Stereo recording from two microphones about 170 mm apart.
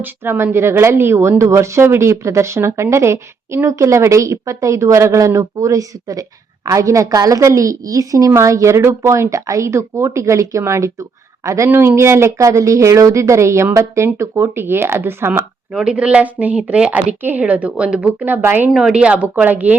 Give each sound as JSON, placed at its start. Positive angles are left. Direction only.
{"t": 0.0, "sound": "a woman's voice", "side_deg": -10}